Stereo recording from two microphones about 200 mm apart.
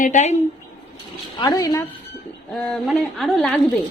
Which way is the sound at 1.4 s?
15° left (ahead or behind).